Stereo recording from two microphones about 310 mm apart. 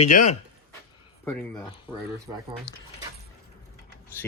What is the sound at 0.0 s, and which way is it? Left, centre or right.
Speech, left.